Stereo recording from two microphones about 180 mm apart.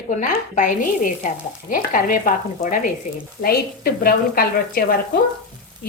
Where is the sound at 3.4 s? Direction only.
55° left (ahead or behind).